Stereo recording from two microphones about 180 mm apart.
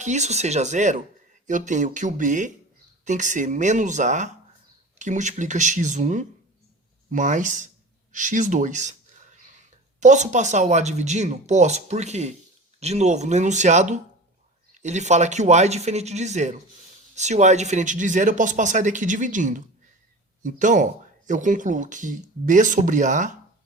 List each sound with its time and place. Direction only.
0.0 s speech: 40° right (ahead or behind)